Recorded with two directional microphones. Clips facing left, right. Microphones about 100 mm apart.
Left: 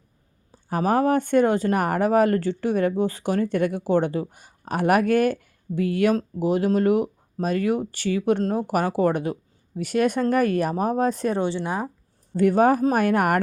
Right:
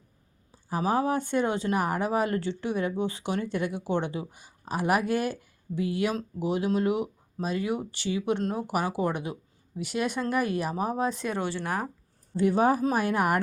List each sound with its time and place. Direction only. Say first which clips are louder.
0.7 s speech: left 6 dB; 55° left (ahead or behind)
11.3 s speech: left 5 dB; 25° left (ahead or behind)
12.4 s speech: left 5 dB; 55° left (ahead or behind)